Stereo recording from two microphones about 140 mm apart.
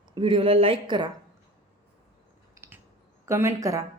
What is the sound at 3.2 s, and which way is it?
Speech, 20° right (ahead or behind).